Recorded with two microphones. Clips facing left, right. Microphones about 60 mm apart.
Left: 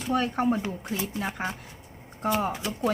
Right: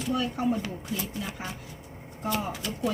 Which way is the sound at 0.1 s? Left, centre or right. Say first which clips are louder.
Left 3 dB; left.